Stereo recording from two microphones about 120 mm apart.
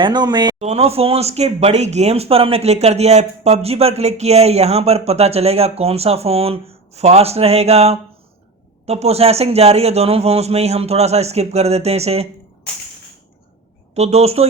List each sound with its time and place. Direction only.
0.0 s speech: 35° right (ahead or behind)
0.6 s speech: 60° right (ahead or behind)
13.9 s speech: 60° right (ahead or behind)